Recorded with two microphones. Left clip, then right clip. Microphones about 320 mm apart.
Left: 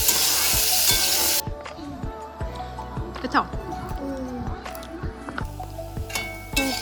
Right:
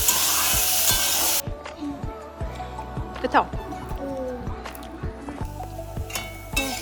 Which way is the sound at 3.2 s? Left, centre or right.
Centre.